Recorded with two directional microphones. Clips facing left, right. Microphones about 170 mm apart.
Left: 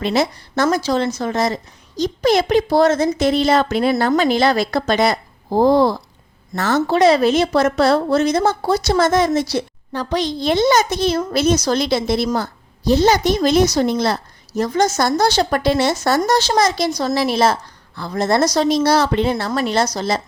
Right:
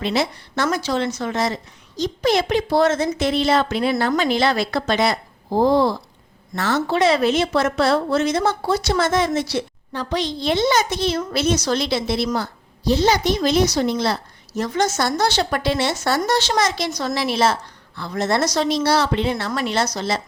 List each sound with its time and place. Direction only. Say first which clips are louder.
0.0 s a woman's voice: left 3 dB; 45° left (ahead or behind)